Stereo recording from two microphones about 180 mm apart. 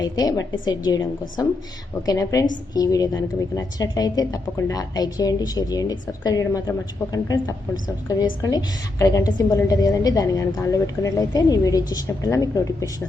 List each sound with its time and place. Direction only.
0.0 s a woman's voice: 20° left (ahead or behind)
2.0 s a woman's voice: 20° left (ahead or behind)